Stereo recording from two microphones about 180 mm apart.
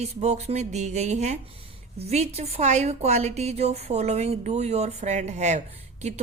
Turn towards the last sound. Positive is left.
turn(degrees=-40)  # may be behind; listen again after turning